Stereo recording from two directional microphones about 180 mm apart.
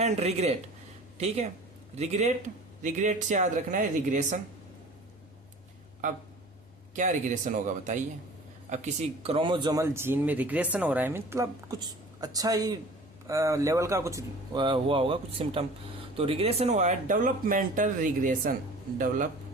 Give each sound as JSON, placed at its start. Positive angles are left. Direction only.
{"t": 0.0, "sound": "speech", "side_deg": -35}
{"t": 2.0, "sound": "speech", "side_deg": -40}
{"t": 6.9, "sound": "speech", "side_deg": -45}